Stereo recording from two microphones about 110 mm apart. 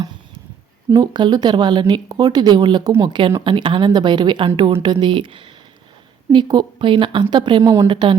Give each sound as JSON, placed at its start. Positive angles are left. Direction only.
{"t": 0.9, "sound": "speech", "side_deg": -40}
{"t": 7.6, "sound": "a woman's voice", "side_deg": -25}
{"t": 7.9, "sound": "speech", "side_deg": -50}